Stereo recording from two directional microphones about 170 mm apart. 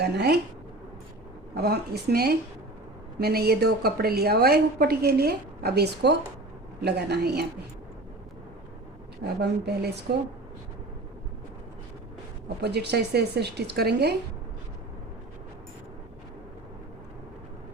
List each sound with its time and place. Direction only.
0.0 s a woman's voice: 70° right (ahead or behind)
1.6 s a woman's voice: 70° right (ahead or behind)
9.2 s a woman's voice: 75° right (ahead or behind)
12.6 s a woman's voice: 75° right (ahead or behind)